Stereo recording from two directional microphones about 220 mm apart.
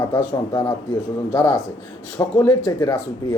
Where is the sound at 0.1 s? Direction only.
15° left (ahead or behind).